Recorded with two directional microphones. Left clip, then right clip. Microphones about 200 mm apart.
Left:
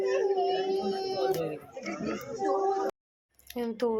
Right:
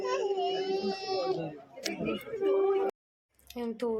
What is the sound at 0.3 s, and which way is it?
Dog, 10° left (ahead or behind).